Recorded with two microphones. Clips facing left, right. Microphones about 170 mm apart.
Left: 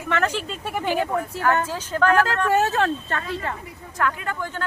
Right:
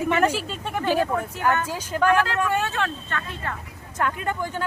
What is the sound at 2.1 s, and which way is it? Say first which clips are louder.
Speech: left 3 dB; 40° left (ahead or behind).